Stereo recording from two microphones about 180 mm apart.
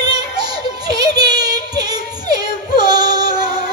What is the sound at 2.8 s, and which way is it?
Music, 20° right (ahead or behind).